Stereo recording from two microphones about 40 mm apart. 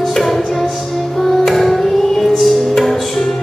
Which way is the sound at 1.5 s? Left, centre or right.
Centre.